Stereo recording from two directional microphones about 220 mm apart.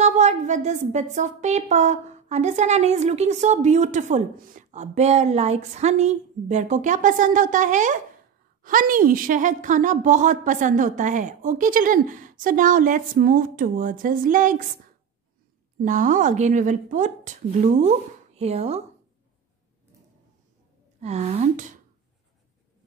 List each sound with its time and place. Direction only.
0.0 s a woman's voice: 30° right (ahead or behind)
15.8 s a woman's voice: 35° right (ahead or behind)
21.0 s a woman's voice: 30° right (ahead or behind)